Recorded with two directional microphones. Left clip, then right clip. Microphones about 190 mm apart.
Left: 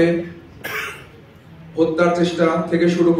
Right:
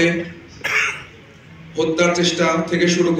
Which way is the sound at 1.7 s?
50° left (ahead or behind).